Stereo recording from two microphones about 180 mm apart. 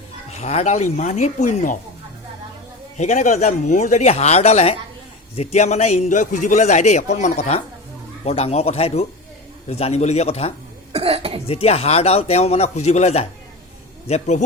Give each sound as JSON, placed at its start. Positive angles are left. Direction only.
{"t": 0.3, "sound": "a man's voice", "side_deg": 40}
{"t": 3.0, "sound": "a man's voice", "side_deg": 40}
{"t": 10.9, "sound": "cough", "side_deg": -35}
{"t": 11.4, "sound": "a man's voice", "side_deg": 35}